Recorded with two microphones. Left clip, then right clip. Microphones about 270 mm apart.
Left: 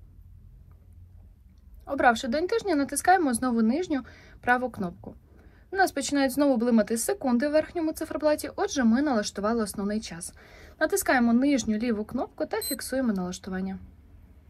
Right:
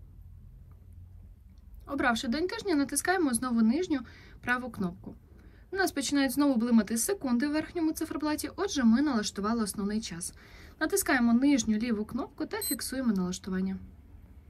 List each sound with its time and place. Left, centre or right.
1.9 s a woman's voice: centre